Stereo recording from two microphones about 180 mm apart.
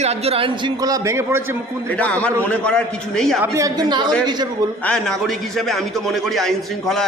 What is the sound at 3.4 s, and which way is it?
Speech, 15° right (ahead or behind).